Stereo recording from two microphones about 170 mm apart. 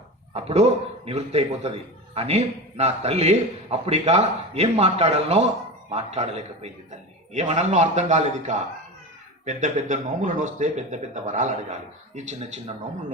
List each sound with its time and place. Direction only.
0.3 s a man's voice: 40° right (ahead or behind)